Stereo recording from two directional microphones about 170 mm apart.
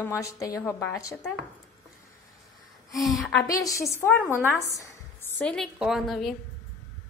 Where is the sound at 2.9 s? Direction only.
Centre (ahead or behind).